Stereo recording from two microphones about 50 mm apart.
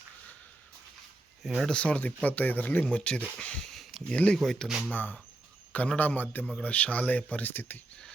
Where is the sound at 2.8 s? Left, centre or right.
Left.